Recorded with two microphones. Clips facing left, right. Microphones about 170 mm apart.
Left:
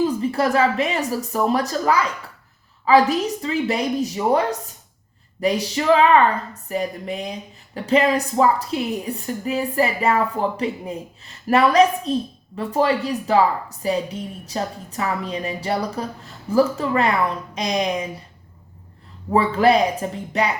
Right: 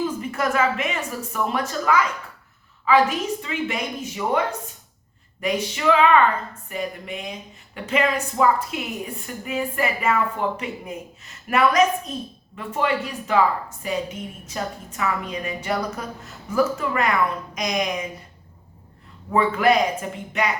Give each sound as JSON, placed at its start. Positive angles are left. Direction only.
{"t": 0.0, "sound": "speech", "side_deg": 35}
{"t": 19.3, "sound": "speech", "side_deg": 30}